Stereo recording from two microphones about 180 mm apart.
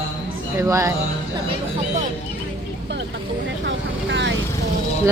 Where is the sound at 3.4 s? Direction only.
85° right.